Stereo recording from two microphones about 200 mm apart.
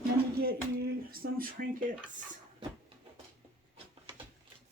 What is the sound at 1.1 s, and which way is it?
Speech, 45° right (ahead or behind).